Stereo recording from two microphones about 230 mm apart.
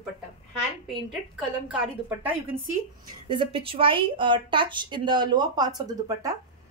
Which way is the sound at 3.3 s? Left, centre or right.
Right.